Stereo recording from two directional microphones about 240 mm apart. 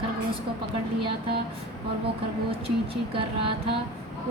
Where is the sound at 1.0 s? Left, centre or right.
Right.